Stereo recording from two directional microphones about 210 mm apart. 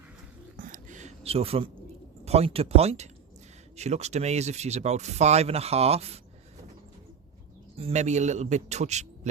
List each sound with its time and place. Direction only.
0.5 s a sound: 40° right (ahead or behind)
2.2 s speech: 30° right (ahead or behind)
7.8 s speech: 30° right (ahead or behind)